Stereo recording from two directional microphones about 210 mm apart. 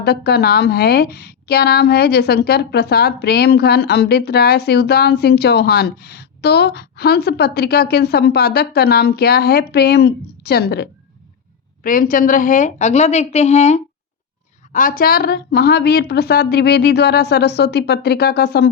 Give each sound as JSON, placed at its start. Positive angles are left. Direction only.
{"t": 0.0, "sound": "a woman's voice", "side_deg": 50}